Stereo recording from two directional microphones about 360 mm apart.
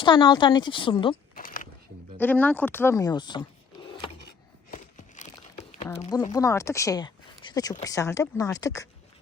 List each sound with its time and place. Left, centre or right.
0.0 s speech: centre
1.1 s a sound: left
2.1 s speech: centre
4.3 s crumpling: left
6.0 s speech: centre